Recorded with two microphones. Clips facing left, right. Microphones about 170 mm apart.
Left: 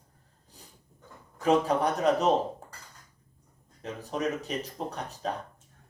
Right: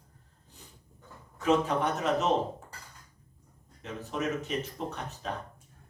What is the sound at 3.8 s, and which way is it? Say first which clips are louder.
Speech: left 2 dB; 35° left (ahead or behind).